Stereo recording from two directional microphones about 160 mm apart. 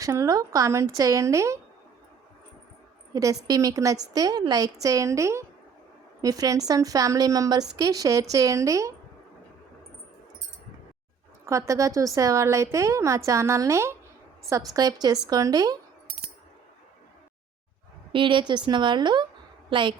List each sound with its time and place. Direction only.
0.0 s a woman's voice: 20° right (ahead or behind)
3.1 s a woman's voice: 20° right (ahead or behind)
11.4 s a woman's voice: 20° right (ahead or behind)
18.1 s a woman's voice: 30° right (ahead or behind)